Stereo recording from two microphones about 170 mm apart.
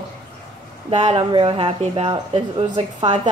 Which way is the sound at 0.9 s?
40° right (ahead or behind).